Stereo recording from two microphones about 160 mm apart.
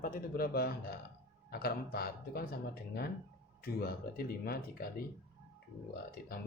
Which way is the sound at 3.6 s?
75° left (ahead or behind).